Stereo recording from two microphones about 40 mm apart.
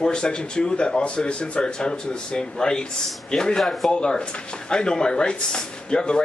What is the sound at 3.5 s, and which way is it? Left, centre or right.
Speech, centre.